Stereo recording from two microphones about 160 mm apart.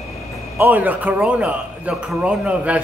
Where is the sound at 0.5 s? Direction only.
10° right (ahead or behind).